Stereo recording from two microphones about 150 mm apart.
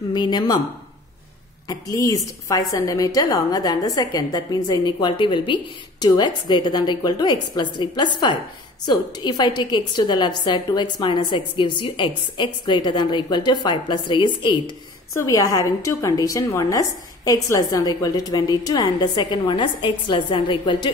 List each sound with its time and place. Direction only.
0.1 s a woman's voice: 30° left (ahead or behind)
1.7 s a woman's voice: 25° left (ahead or behind)